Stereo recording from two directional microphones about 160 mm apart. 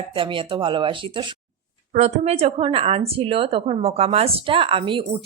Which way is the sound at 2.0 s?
40° right (ahead or behind).